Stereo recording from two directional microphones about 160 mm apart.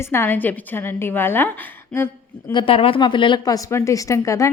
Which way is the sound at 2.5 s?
35° left (ahead or behind).